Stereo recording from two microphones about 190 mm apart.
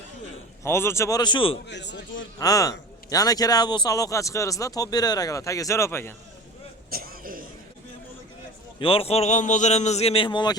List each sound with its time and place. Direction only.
0.6 s a man's voice: 15° left (ahead or behind)
1.6 s a man's voice: 65° left (ahead or behind)
2.4 s speech: 20° left (ahead or behind)
6.9 s throat clearing: 50° right (ahead or behind)
8.8 s a man's voice: 30° left (ahead or behind)